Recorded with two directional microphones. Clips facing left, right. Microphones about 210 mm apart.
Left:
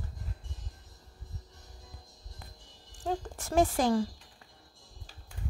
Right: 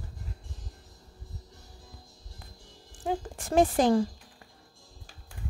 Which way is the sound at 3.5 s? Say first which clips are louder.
Right 4 dB; 20° right (ahead or behind).